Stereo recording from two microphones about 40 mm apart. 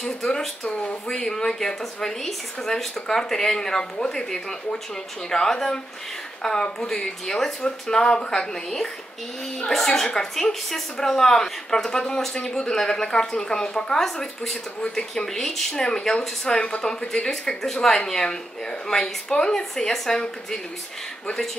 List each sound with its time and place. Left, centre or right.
0.0 s a woman's voice: centre
9.7 s a woman's voice: centre
15.2 s a woman's voice: centre